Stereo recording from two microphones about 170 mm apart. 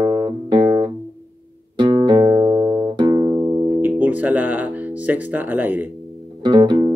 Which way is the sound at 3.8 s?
10° right (ahead or behind).